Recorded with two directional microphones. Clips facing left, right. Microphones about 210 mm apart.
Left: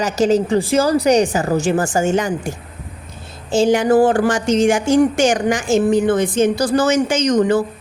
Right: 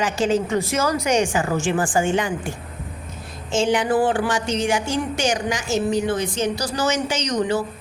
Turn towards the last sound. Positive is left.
turn(degrees=50)  # may be behind; listen again after turning